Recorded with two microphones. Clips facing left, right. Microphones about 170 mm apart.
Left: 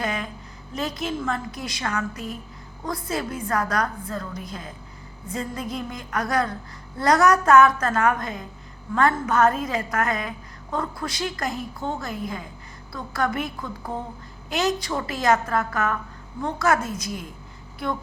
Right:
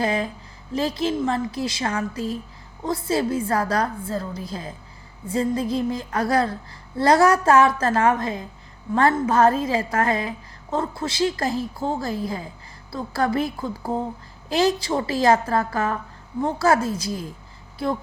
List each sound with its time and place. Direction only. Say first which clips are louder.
0.0 s a woman's voice: right 5 dB; 30° right (ahead or behind)